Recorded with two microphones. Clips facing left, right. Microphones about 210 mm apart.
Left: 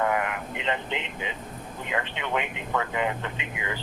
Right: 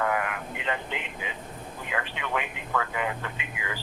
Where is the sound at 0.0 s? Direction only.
25° left (ahead or behind).